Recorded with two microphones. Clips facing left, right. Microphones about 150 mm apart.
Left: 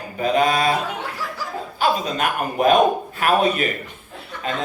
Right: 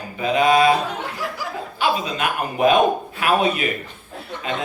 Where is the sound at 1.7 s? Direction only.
40° left (ahead or behind).